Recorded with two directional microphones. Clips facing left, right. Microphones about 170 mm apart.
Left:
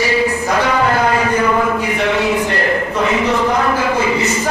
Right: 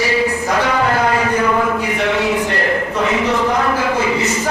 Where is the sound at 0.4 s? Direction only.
15° left (ahead or behind).